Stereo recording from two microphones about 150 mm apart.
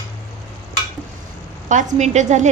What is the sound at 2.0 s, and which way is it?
Speech, 50° right (ahead or behind).